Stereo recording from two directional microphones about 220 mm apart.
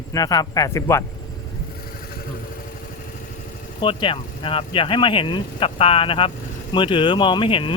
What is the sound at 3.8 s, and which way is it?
Speech, 20° left (ahead or behind).